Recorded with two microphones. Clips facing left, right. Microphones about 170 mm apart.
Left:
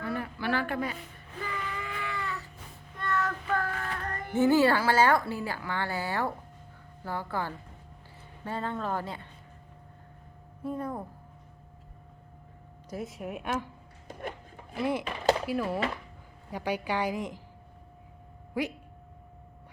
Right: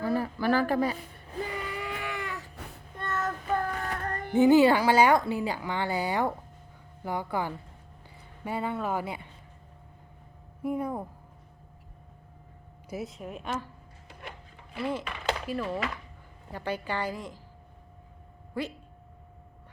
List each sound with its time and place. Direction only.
0.0 s a sound: 35° right (ahead or behind)
3.0 s child singing: 25° right (ahead or behind)
4.3 s a woman's voice: 15° right (ahead or behind)
10.6 s a woman's voice: 10° right (ahead or behind)
12.9 s speech: 5° right (ahead or behind)
13.1 s a woman's voice: 10° left (ahead or behind)
14.1 s a sound: 45° left (ahead or behind)
14.8 s a woman's voice: 10° left (ahead or behind)
15.0 s chopping: 35° left (ahead or behind)
15.4 s a woman's voice: 10° left (ahead or behind)
18.5 s a woman's voice: 15° left (ahead or behind)